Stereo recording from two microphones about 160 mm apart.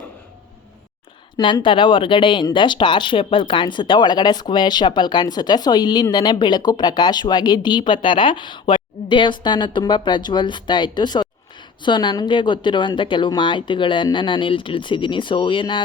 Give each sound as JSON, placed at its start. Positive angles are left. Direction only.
{"t": 1.4, "sound": "speech", "side_deg": 30}